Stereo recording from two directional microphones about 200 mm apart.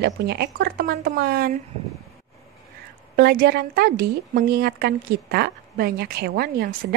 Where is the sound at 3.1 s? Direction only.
50° right (ahead or behind).